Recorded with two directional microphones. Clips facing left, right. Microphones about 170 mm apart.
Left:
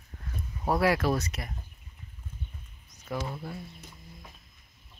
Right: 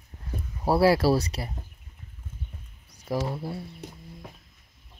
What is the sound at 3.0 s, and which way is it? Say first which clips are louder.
Speech: right 6 dB; 35° right (ahead or behind).